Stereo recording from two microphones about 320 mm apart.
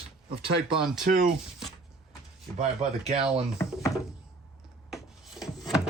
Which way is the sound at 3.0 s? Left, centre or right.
Centre.